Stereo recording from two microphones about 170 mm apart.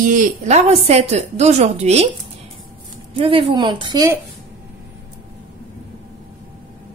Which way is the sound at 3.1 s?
35° right (ahead or behind).